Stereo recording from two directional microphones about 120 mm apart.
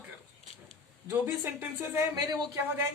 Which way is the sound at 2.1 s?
35° right (ahead or behind).